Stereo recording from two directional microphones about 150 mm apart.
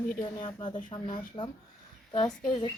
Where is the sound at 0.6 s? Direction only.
30° left (ahead or behind).